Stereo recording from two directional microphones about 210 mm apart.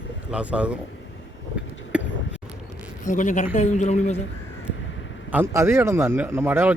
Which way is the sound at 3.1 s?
35° left (ahead or behind).